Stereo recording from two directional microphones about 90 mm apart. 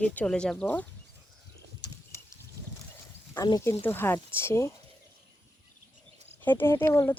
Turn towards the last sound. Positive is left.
turn(degrees=30)  # may be behind; listen again after turning